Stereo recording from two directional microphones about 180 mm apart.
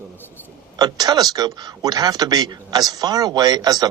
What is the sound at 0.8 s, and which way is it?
Speech, 20° right (ahead or behind).